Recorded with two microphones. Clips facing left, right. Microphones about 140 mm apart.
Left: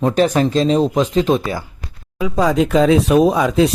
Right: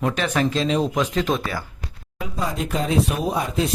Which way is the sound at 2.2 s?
90° left.